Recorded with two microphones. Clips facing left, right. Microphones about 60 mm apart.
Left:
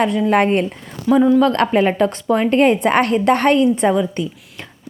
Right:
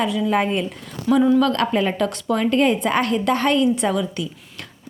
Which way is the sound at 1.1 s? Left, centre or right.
Centre.